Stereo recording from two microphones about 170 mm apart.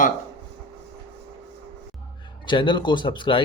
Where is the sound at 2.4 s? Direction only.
30° left (ahead or behind).